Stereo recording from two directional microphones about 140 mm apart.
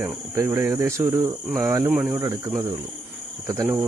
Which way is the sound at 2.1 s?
20° right (ahead or behind).